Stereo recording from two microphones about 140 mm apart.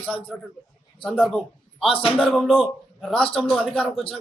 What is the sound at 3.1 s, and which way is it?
Speech, 40° left (ahead or behind).